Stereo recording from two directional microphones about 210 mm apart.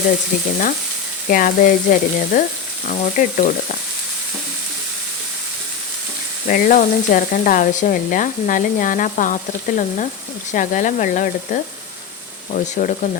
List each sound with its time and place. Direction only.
1.3 s sizzle: 40° left (ahead or behind)
6.5 s sizzle: 40° left (ahead or behind)
12.7 s sizzle: 35° left (ahead or behind)